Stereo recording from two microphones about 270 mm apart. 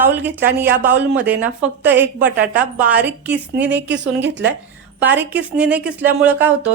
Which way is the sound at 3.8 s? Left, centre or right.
Right.